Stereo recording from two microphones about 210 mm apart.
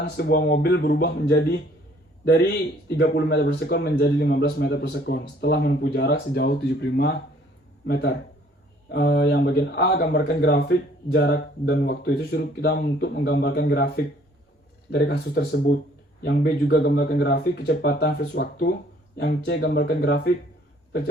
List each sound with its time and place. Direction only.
0.0 s speech: 50° left (ahead or behind)